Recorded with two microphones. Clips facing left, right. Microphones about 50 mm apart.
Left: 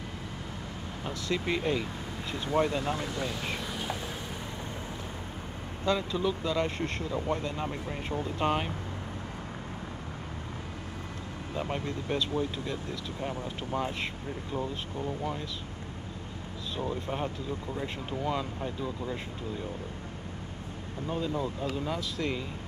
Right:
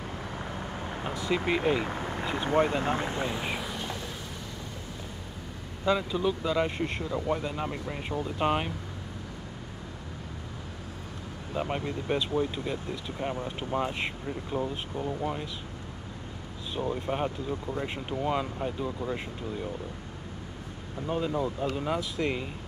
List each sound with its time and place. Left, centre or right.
1.1 s speech: centre
1.6 s speech: right
1.9 s vehicle: right
2.3 s speech: right; by 3.6 s centre
3.6 s vehicle: centre
5.9 s speech: centre
11.5 s speech: centre
16.7 s speech: centre
21.1 s speech: centre